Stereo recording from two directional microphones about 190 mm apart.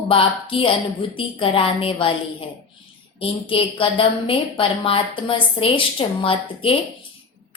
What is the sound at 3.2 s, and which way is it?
A woman's voice, 25° left (ahead or behind).